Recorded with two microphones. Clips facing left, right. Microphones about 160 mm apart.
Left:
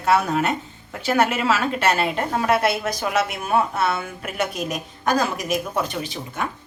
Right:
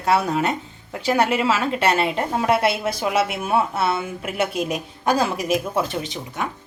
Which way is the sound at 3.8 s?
30° right (ahead or behind).